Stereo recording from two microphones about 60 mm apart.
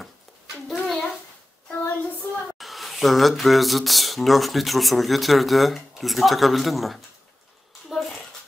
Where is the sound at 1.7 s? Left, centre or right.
Left.